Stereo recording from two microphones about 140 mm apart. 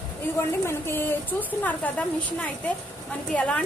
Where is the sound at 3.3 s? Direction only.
10° left (ahead or behind).